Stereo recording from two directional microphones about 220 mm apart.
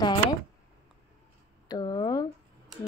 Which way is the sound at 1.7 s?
20° left (ahead or behind).